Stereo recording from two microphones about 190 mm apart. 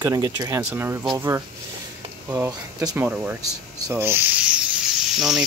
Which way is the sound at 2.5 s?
15° right (ahead or behind).